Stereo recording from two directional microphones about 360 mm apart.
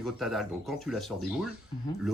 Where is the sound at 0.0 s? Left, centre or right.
Centre.